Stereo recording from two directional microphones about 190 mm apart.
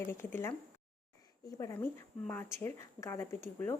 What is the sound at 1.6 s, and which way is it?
Speech, 15° left (ahead or behind).